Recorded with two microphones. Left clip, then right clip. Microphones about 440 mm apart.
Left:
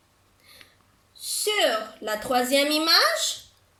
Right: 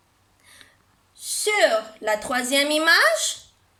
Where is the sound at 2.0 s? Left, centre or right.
Right.